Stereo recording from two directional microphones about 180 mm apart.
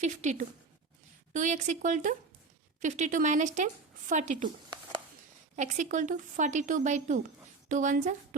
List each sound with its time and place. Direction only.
0.0 s a woman's voice: 40° right (ahead or behind)
5.5 s a woman's voice: 45° right (ahead or behind)